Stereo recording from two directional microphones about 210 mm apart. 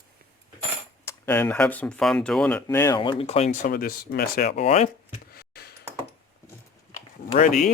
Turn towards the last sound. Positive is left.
turn(degrees=35)  # may be behind; listen again after turning